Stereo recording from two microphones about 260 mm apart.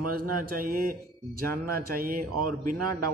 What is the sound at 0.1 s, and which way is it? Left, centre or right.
Speech, right.